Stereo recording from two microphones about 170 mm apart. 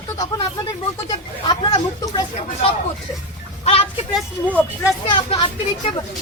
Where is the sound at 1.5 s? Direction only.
30° left (ahead or behind).